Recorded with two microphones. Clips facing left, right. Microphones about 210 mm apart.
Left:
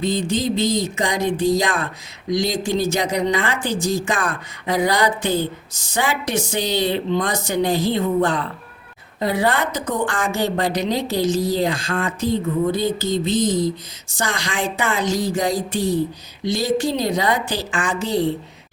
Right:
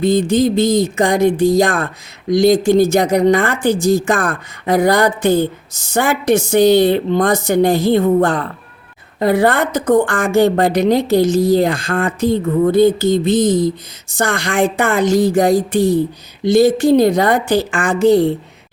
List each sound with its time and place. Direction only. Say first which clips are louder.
0.0 s a woman's voice: right 8 dB; 50° right (ahead or behind)